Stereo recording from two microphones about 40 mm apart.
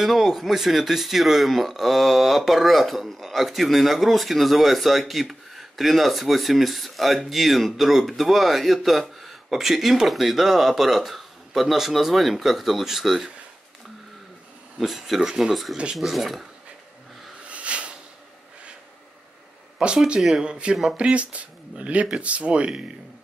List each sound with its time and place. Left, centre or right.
0.0 s speech: centre
14.8 s speech: centre
17.5 s a sound: right
20.3 s speech: right